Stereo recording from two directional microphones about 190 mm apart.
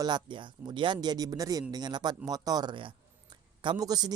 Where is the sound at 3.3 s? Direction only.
25° right (ahead or behind).